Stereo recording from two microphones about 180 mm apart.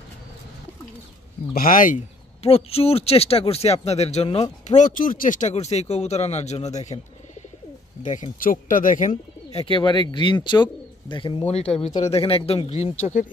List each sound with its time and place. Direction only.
1.5 s speech: 50° left (ahead or behind)
8.0 s speech: 45° left (ahead or behind)
9.1 s speech: 30° left (ahead or behind)